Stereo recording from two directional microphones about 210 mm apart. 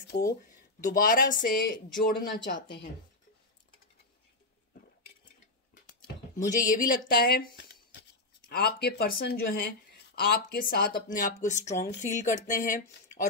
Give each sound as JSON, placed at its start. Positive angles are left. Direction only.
{"t": 0.1, "sound": "a woman's voice", "side_deg": 50}
{"t": 6.3, "sound": "speech", "side_deg": 40}
{"t": 8.5, "sound": "a woman's voice", "side_deg": 50}